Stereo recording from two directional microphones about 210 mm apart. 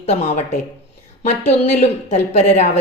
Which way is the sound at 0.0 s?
30° left (ahead or behind).